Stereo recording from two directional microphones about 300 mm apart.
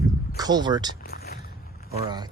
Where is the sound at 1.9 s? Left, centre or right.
Centre.